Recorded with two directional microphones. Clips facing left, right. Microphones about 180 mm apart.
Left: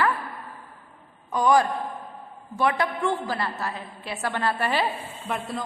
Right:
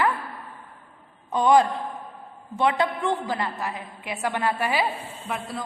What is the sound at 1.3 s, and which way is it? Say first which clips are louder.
A woman's voice: right 2 dB; 20° right (ahead or behind).